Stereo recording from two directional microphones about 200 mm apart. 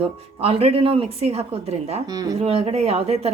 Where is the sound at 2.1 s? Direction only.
20° right (ahead or behind).